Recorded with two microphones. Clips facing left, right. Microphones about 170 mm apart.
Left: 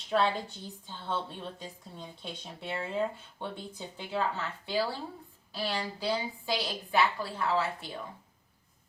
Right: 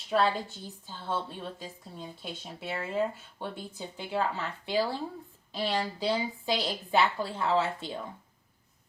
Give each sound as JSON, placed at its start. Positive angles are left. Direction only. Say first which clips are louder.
{"t": 0.1, "sound": "a woman's voice", "louder": "right 1 dB", "side_deg": 0}